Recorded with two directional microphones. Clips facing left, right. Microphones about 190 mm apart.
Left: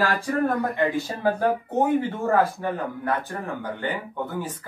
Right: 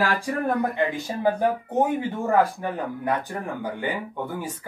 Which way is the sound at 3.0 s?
10° right (ahead or behind).